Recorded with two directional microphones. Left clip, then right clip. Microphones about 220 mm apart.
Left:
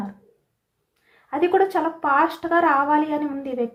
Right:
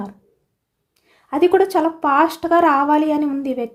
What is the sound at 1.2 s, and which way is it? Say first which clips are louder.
A woman's voice: right 4 dB; 55° right (ahead or behind).